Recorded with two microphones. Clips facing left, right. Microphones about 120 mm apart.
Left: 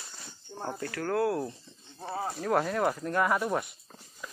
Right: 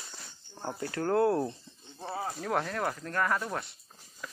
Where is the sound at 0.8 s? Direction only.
25° right (ahead or behind).